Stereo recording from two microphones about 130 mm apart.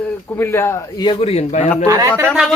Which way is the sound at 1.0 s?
45° left (ahead or behind).